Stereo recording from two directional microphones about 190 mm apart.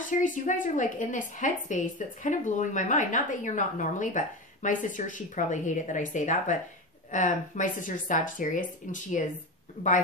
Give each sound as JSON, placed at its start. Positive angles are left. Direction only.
{"t": 0.2, "sound": "a woman's voice", "side_deg": 40}